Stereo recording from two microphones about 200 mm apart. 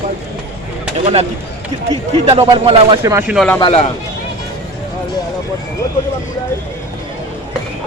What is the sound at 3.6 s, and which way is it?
Speech, 30° left (ahead or behind).